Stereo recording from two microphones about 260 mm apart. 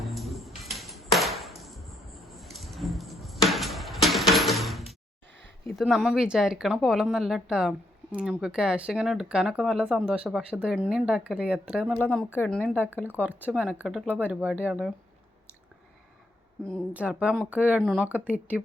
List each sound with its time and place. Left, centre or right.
0.0 s a sound: centre
5.6 s speech: centre
16.6 s speech: centre